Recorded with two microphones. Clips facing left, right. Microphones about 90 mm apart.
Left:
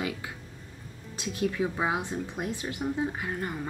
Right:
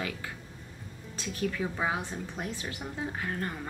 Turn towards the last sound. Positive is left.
turn(degrees=10)  # may be behind; listen again after turning